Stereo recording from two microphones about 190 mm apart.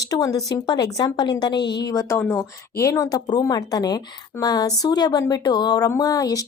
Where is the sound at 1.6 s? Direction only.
65° left (ahead or behind).